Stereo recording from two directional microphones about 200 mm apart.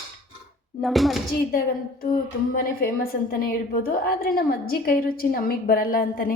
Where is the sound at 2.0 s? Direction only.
35° left (ahead or behind).